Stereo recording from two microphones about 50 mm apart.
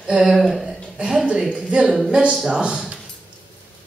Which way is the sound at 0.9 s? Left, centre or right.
Centre.